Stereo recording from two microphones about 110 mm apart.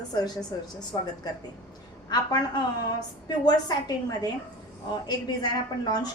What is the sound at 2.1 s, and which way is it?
Speech, 40° left (ahead or behind).